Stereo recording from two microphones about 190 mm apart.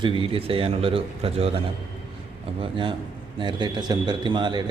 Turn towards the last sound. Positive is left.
turn(degrees=-25)  # may be behind; listen again after turning